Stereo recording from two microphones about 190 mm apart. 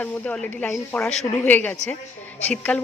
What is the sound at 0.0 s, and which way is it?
A woman's voice, 5° left (ahead or behind).